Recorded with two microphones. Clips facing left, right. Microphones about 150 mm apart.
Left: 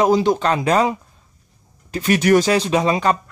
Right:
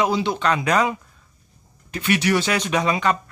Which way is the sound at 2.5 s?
30° left (ahead or behind).